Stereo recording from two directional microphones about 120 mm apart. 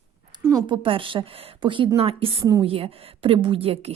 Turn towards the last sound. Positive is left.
turn(degrees=-55)  # may be behind; listen again after turning